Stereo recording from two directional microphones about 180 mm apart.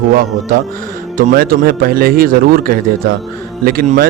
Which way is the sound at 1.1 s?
50° right (ahead or behind).